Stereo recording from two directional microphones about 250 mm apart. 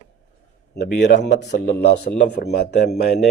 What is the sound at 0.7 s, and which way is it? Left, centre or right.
A man's voice, left.